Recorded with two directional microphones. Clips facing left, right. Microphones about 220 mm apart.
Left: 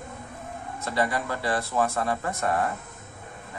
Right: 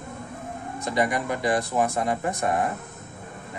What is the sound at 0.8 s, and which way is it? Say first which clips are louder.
Speech: right 2 dB; 15° right (ahead or behind).